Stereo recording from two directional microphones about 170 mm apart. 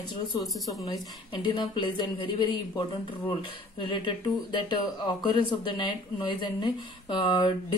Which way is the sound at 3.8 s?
30° left (ahead or behind).